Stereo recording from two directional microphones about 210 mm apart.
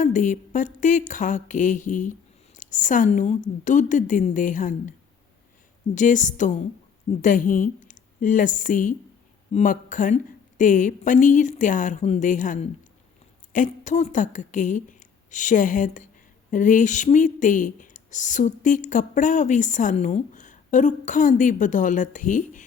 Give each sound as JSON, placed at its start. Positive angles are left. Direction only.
{"t": 0.0, "sound": "a woman's voice", "side_deg": 35}